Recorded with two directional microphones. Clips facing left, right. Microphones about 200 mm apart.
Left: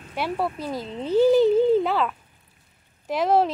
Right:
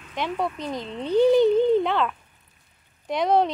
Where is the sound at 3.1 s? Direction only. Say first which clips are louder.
Even; 5° left (ahead or behind).